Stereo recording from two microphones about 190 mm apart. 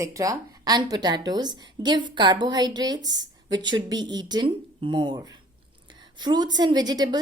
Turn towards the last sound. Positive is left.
turn(degrees=-20)  # may be behind; listen again after turning